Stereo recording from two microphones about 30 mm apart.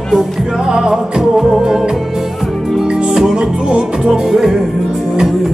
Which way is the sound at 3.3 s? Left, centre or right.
Right.